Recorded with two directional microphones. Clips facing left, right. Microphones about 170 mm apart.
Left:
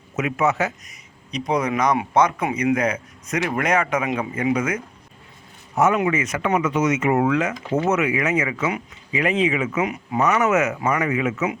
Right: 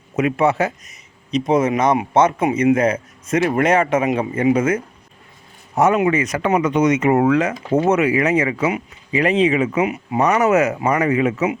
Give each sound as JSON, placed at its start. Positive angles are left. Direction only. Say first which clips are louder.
{"t": 0.2, "sound": "speech", "louder": "right 4 dB", "side_deg": -30}